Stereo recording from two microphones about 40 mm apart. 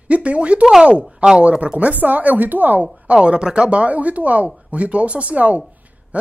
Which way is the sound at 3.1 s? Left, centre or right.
Right.